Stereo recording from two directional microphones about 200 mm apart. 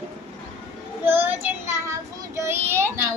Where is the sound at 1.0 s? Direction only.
10° right (ahead or behind).